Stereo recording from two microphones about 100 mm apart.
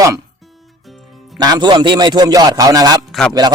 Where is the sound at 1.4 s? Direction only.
45° right (ahead or behind).